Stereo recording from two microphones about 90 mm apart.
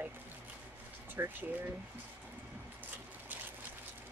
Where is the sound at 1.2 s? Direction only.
20° right (ahead or behind).